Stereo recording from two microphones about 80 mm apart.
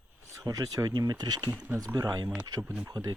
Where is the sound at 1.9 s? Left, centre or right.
Right.